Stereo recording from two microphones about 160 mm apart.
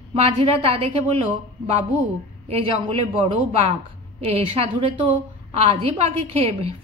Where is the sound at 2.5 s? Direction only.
35° right (ahead or behind).